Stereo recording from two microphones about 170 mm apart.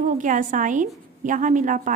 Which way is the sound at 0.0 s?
50° right (ahead or behind).